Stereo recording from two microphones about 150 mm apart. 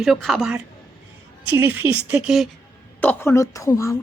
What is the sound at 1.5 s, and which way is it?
Speech, 10° right (ahead or behind).